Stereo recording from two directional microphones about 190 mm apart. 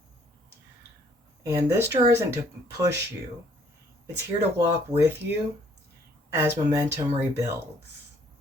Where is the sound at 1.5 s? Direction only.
15° right (ahead or behind).